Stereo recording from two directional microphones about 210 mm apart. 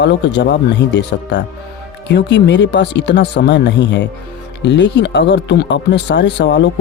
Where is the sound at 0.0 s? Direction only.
55° left (ahead or behind).